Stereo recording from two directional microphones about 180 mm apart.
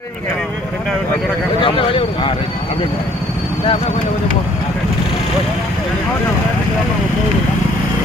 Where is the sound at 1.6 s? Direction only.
30° left (ahead or behind).